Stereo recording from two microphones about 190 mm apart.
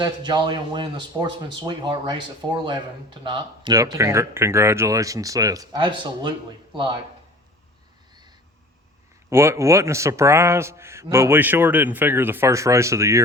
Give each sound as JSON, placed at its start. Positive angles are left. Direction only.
{"t": 0.0, "sound": "a man's voice", "side_deg": -25}
{"t": 9.3, "sound": "a man's voice", "side_deg": -15}